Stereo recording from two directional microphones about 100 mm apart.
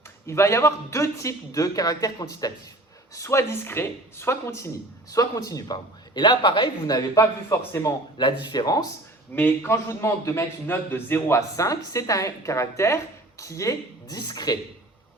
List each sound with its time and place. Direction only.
0.3 s a man's voice: 25° left (ahead or behind)
3.2 s a man's voice: 25° left (ahead or behind)
5.1 s a man's voice: 35° left (ahead or behind)
6.1 s a man's voice: 50° left (ahead or behind); by 7.9 s 25° left (ahead or behind)
8.2 s speech: 50° left (ahead or behind)
9.3 s a man's voice: 20° left (ahead or behind)
14.2 s speech: 45° left (ahead or behind)